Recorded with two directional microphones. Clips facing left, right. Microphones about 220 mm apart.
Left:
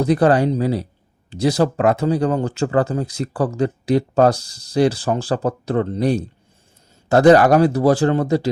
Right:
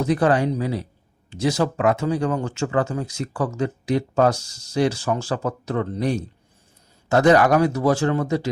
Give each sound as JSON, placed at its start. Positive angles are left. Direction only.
{"t": 0.0, "sound": "speech", "side_deg": 35}